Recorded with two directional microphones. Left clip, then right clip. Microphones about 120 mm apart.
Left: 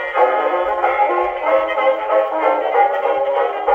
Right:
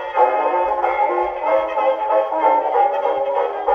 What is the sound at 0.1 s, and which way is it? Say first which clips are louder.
Music: even; 25° left (ahead or behind).